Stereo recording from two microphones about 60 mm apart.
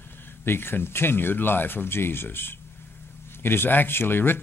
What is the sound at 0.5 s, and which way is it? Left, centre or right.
Speech, left.